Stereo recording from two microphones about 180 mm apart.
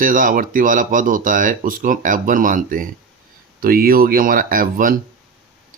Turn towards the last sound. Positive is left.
turn(degrees=-50)  # may be behind; listen again after turning